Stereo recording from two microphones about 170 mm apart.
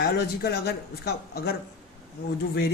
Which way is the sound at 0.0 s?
70° left (ahead or behind).